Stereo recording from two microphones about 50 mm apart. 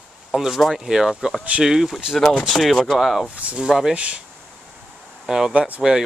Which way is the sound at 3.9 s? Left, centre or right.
Right.